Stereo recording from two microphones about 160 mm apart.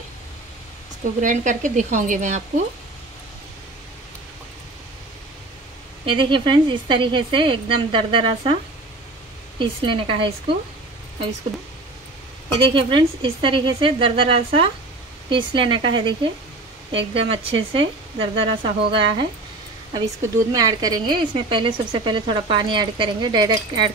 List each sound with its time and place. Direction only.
1.2 s speech: 50° right (ahead or behind)
6.0 s a woman's voice: 30° right (ahead or behind)
9.6 s a woman's voice: 35° right (ahead or behind)
12.5 s a woman's voice: 35° right (ahead or behind)
20.2 s a woman's voice: 20° right (ahead or behind)